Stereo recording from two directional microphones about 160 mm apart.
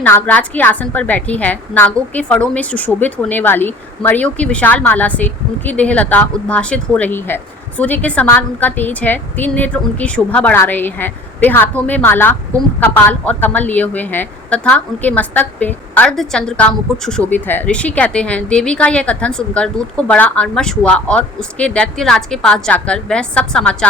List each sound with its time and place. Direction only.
0.0 s a woman's voice: 10° left (ahead or behind)